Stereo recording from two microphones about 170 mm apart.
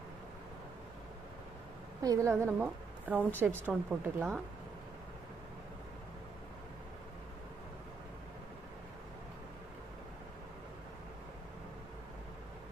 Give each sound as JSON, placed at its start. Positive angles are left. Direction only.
{"t": 2.0, "sound": "a woman's voice", "side_deg": -20}